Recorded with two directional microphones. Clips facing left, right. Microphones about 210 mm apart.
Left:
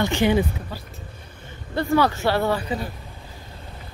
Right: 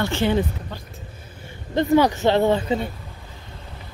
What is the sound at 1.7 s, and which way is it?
Speech, 20° right (ahead or behind).